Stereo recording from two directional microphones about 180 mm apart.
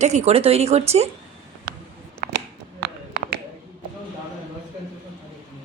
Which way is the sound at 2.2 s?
65° right (ahead or behind).